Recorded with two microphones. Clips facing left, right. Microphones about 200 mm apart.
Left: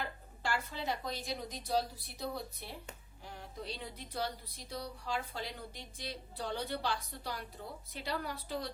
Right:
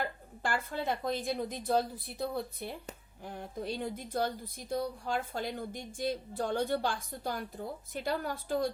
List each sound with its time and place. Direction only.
0.4 s speech: 50° right (ahead or behind)